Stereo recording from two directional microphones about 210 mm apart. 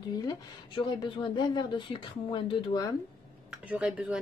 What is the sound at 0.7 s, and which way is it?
Speech, 25° left (ahead or behind).